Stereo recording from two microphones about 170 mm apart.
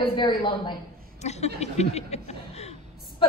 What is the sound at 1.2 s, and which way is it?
A woman's voice, 40° left (ahead or behind).